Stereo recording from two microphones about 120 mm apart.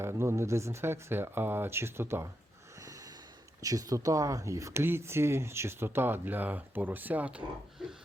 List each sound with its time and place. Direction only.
0.0 s speech: 20° right (ahead or behind)
3.6 s speech: 30° right (ahead or behind); by 7.9 s 5° right (ahead or behind)